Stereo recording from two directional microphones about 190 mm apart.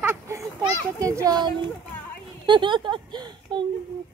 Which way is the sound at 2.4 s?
25° right (ahead or behind).